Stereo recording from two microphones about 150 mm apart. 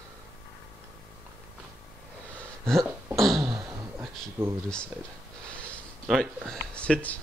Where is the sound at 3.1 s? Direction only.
Centre (ahead or behind).